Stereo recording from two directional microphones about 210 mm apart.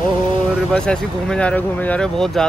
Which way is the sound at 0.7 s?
5° left (ahead or behind).